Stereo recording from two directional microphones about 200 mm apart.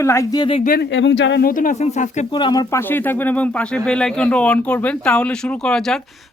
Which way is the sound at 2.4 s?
20° left (ahead or behind).